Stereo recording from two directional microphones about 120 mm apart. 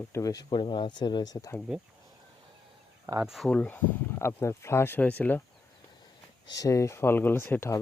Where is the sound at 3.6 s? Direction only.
15° left (ahead or behind).